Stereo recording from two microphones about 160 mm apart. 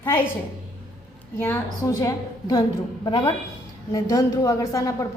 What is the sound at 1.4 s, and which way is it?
A woman's voice, 15° left (ahead or behind).